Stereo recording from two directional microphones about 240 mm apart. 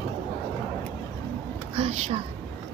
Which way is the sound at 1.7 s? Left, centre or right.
Right.